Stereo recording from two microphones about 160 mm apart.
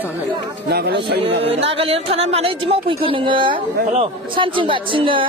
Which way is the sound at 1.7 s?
35° right (ahead or behind).